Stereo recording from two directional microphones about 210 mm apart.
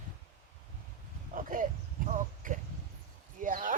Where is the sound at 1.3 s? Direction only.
40° right (ahead or behind).